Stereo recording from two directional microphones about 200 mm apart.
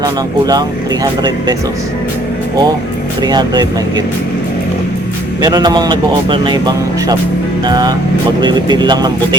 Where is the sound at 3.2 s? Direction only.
20° right (ahead or behind).